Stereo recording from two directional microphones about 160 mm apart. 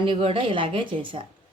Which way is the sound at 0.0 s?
35° right (ahead or behind).